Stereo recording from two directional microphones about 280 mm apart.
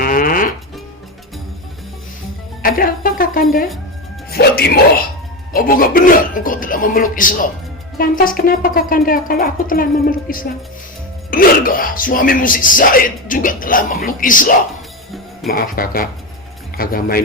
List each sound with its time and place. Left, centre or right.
0.0 s music: left
2.6 s speech: left